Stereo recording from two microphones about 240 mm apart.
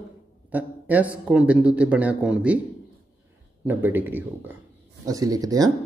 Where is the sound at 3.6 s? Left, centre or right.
Centre.